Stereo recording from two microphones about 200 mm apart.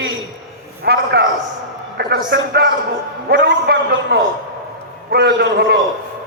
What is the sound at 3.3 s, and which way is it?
A man's voice, 60° right (ahead or behind).